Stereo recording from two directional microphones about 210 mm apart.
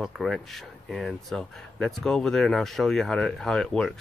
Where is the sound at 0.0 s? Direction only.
Centre (ahead or behind).